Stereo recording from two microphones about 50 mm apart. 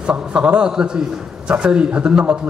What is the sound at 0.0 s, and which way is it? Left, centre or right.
A man's voice, right.